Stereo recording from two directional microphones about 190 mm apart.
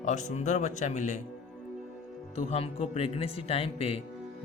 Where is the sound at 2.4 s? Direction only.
35° left (ahead or behind).